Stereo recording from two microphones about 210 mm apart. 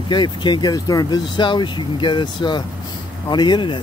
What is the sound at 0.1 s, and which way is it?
Speech, 20° left (ahead or behind).